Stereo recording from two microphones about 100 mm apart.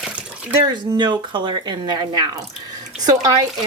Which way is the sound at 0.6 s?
45° right (ahead or behind).